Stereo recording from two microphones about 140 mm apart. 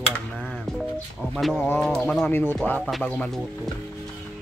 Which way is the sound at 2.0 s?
10° left (ahead or behind).